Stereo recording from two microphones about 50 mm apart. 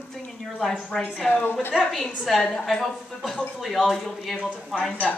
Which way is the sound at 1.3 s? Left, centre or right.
Left.